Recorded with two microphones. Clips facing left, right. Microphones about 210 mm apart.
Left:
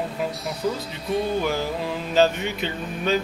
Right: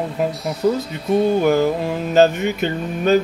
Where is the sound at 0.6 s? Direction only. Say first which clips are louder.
Right 8 dB; 55° right (ahead or behind).